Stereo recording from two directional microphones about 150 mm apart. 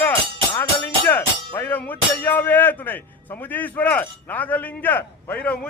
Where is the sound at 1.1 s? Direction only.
15° left (ahead or behind).